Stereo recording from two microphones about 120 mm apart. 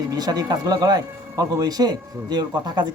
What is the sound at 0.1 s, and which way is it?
A man's voice, 30° right (ahead or behind).